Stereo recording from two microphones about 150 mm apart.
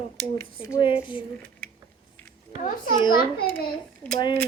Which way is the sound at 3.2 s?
85° left.